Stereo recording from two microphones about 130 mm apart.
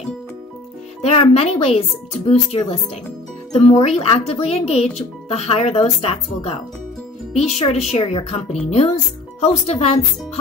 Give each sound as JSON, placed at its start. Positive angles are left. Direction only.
{"t": 1.0, "sound": "speech", "side_deg": 50}